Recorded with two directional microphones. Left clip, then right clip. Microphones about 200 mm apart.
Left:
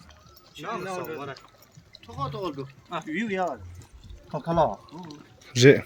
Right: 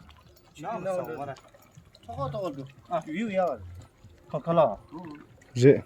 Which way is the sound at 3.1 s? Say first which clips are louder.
Left 2 dB; 45° right (ahead or behind).